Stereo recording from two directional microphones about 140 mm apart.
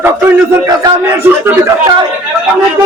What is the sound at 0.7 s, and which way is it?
Speech, 25° right (ahead or behind).